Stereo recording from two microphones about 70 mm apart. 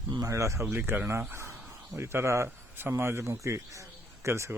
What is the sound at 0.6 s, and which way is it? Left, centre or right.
Speech, right.